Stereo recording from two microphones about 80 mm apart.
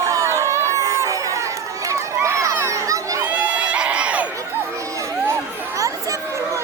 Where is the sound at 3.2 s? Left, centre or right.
Centre.